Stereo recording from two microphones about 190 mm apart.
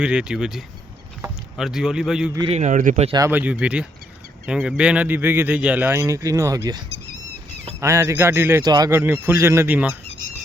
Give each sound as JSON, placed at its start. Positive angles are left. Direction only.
{"t": 0.0, "sound": "speech", "side_deg": -5}
{"t": 2.5, "sound": "speech", "side_deg": -40}
{"t": 3.1, "sound": "speech", "side_deg": -15}